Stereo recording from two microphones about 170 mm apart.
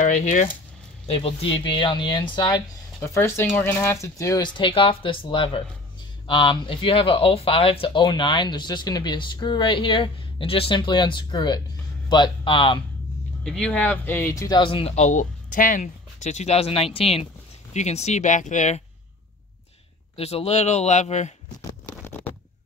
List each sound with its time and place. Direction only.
0.0 s speech: 45° left (ahead or behind)
1.0 s speech: 35° left (ahead or behind)
3.2 s speech: 15° left (ahead or behind); by 12.7 s 30° left (ahead or behind)
13.4 s speech: 5° left (ahead or behind)
14.6 s speech: 30° left (ahead or behind)
20.2 s speech: 35° left (ahead or behind)
21.5 s a sound: 20° left (ahead or behind)